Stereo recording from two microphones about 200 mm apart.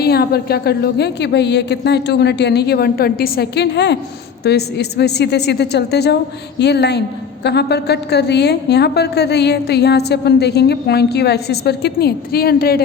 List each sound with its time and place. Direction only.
0.0 s a woman's voice: 50° left (ahead or behind)